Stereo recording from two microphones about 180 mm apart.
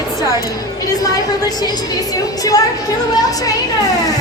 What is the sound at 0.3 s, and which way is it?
A man's voice, 20° left (ahead or behind).